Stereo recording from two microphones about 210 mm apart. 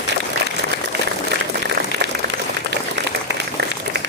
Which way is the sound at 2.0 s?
55° right (ahead or behind).